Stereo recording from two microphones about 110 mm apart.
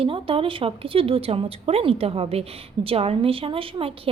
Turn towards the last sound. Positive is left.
turn(degrees=-55)  # may be behind; listen again after turning